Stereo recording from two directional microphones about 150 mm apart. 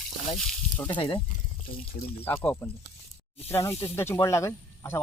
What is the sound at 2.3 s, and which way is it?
Speech, 15° left (ahead or behind).